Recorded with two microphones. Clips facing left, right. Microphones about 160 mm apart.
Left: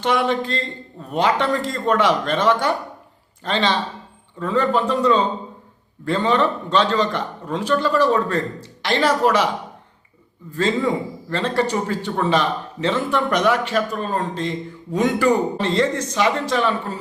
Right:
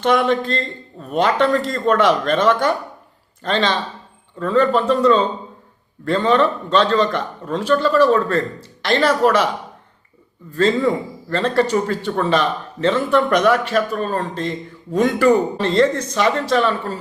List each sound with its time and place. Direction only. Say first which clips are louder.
0.0 s a man's voice: right 3 dB; 15° left (ahead or behind)
10.5 s a man's voice: right 3 dB; 15° left (ahead or behind)
14.9 s a man's voice: right 3 dB; 15° left (ahead or behind)